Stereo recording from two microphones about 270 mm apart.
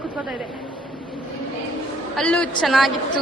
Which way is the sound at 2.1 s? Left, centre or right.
Centre.